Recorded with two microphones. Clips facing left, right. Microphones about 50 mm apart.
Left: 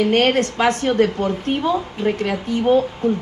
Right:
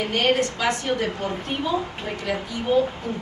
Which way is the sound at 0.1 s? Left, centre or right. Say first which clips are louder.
Left 5 dB; left.